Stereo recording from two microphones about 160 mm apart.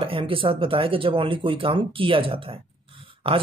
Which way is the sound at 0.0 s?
35° right (ahead or behind).